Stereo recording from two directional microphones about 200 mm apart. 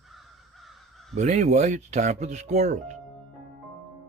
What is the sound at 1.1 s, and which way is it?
Speech, 35° right (ahead or behind).